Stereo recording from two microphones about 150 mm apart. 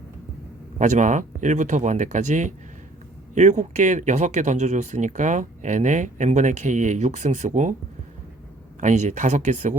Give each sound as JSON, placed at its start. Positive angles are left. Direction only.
{"t": 0.8, "sound": "speech", "side_deg": -55}
{"t": 8.8, "sound": "speech", "side_deg": -55}